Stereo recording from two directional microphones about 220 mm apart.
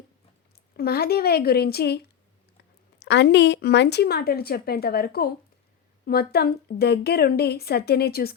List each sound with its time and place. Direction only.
0.8 s speech: 45° left (ahead or behind)